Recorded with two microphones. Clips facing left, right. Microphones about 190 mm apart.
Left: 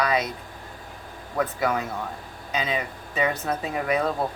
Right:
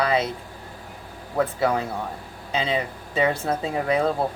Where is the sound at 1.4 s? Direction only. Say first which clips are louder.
Right 3 dB; 30° right (ahead or behind).